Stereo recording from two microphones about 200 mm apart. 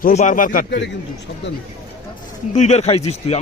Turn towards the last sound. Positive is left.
turn(degrees=30)  # may be behind; listen again after turning